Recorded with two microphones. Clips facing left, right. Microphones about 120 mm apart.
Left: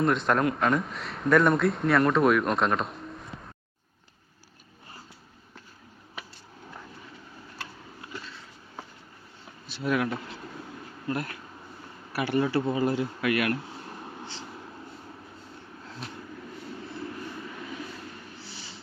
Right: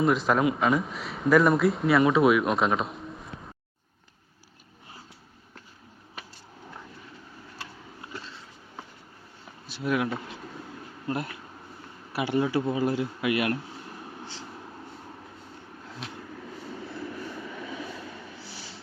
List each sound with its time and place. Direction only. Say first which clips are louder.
0.0 s a man's voice: right 1 dB; centre (ahead or behind)
9.6 s speech: even; 10° right (ahead or behind)
11.1 s speech: even; 25° right (ahead or behind); by 13.1 s centre (ahead or behind)
13.2 s speech: even; 20° right (ahead or behind)